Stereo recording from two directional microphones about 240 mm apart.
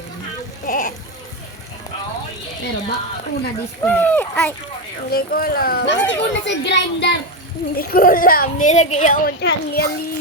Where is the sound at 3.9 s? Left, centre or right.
Centre.